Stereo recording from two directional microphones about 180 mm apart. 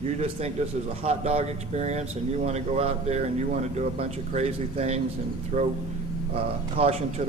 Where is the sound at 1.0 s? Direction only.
35° right (ahead or behind).